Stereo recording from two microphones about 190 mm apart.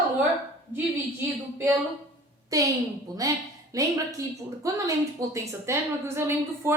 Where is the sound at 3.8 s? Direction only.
20° right (ahead or behind).